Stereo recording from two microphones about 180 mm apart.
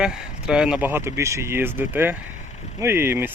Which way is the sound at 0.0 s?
5° right (ahead or behind).